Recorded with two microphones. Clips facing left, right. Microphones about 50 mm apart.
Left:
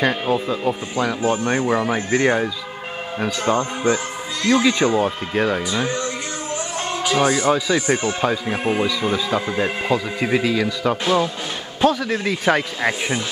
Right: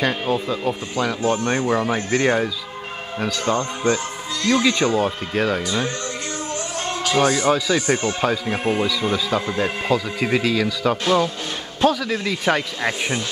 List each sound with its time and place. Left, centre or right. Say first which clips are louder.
0.0 s speech: left 2 dB; centre
3.3 s speech: left 2 dB; centre
11.9 s a man's voice: left 1 dB; left
12.4 s speech: left 2 dB; centre